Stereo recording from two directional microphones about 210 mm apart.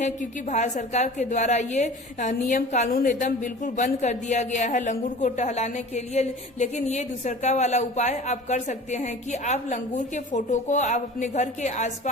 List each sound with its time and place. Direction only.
0.0 s a woman's voice: 35° left (ahead or behind)